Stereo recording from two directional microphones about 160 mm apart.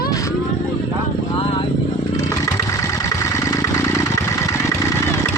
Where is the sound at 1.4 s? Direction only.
35° left (ahead or behind).